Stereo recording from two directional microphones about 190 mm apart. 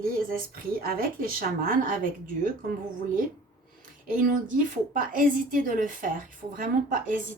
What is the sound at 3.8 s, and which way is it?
A woman's voice, 45° right (ahead or behind).